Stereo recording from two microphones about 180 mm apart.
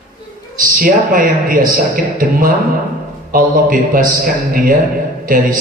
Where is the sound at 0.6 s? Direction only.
50° right (ahead or behind).